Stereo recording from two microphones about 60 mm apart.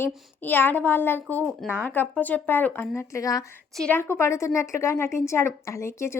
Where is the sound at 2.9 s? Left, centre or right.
Left.